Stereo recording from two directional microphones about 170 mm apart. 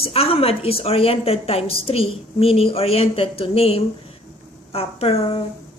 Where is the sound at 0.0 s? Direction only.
35° left (ahead or behind).